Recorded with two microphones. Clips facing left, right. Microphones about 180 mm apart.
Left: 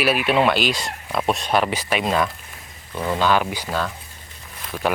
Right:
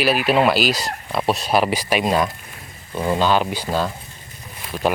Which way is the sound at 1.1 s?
Centre (ahead or behind).